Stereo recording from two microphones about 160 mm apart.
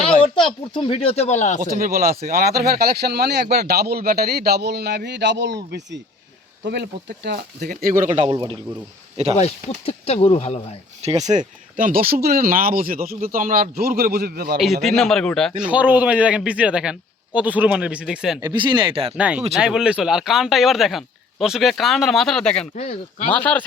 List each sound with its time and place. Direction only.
0.3 s speech: 30° left (ahead or behind); by 1.8 s 50° left (ahead or behind)
1.8 s speech: 65° right (ahead or behind); by 5.5 s 90° right
6.7 s speech: 90° right; by 8.1 s 60° right (ahead or behind)
8.1 s a man's voice: 35° right (ahead or behind)
9.3 s speech: 40° left (ahead or behind)
11.0 s speech: 45° right (ahead or behind); by 14.6 s 75° right (ahead or behind)
14.8 s a man's voice: centre (ahead or behind)
18.3 s speech: 25° right (ahead or behind)
19.1 s a man's voice: 5° right (ahead or behind)
22.7 s speech: 50° left (ahead or behind)
23.3 s speech: 10° left (ahead or behind)